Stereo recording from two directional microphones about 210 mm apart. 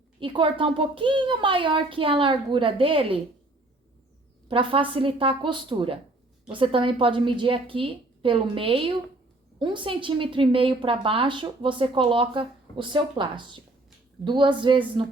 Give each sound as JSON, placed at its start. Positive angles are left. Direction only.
{"t": 0.2, "sound": "a woman's voice", "side_deg": -25}
{"t": 4.4, "sound": "a woman's voice", "side_deg": -25}